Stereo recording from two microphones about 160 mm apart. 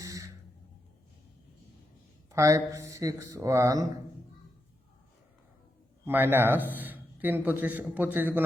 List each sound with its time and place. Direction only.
0.0 s a sound: 20° right (ahead or behind)
2.3 s speech: 20° right (ahead or behind)
6.1 s a man's voice: 10° right (ahead or behind)